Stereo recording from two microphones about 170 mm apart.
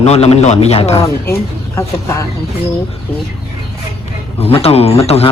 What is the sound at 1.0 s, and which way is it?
Speech, 15° left (ahead or behind).